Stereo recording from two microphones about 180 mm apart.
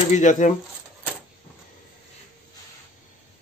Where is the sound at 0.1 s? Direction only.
45° left (ahead or behind).